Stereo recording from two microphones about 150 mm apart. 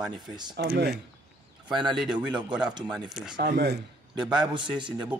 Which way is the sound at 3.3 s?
90° right.